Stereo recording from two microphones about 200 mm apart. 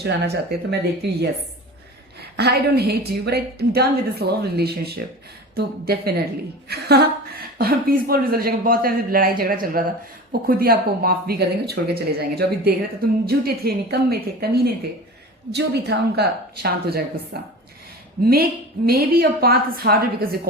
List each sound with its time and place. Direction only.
0.0 s speech: 55° right (ahead or behind)
2.3 s speech: 55° right (ahead or behind)